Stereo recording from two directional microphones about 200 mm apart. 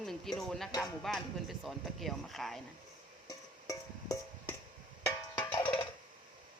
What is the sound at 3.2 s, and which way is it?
Music, 15° left (ahead or behind).